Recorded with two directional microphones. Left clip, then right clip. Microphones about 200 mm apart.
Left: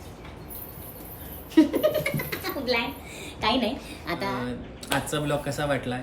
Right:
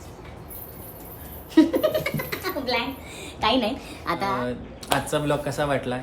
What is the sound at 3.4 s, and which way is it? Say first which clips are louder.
A woman's voice: right 3 dB; 15° right (ahead or behind).